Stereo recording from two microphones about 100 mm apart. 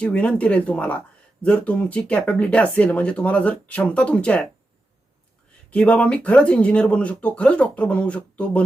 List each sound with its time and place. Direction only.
0.0 s speech: 10° left (ahead or behind)
5.7 s speech: 10° left (ahead or behind)